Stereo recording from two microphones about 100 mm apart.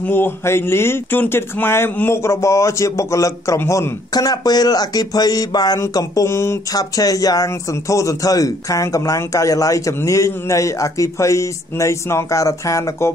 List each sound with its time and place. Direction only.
0.0 s speech: 20° left (ahead or behind)
4.1 s a man's voice: 40° left (ahead or behind)
6.7 s a man's voice: 40° left (ahead or behind)